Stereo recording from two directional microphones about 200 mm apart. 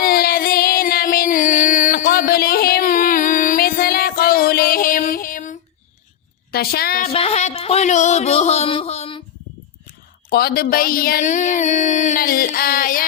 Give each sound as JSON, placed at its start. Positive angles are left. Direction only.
{"t": 0.0, "sound": "music", "side_deg": 50}
{"t": 6.5, "sound": "speech", "side_deg": 50}
{"t": 7.1, "sound": "a sound", "side_deg": 30}
{"t": 10.2, "sound": "speech", "side_deg": 50}